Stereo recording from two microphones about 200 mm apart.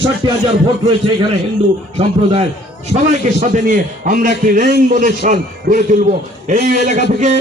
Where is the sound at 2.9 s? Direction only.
35° right (ahead or behind).